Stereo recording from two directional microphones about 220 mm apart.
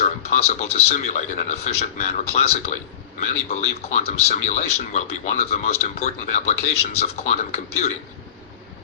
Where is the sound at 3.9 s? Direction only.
30° left (ahead or behind).